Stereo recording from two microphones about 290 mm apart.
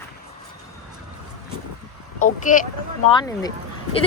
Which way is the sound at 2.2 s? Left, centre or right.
Left.